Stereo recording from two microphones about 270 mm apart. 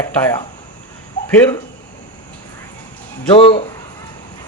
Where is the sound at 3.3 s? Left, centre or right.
Centre.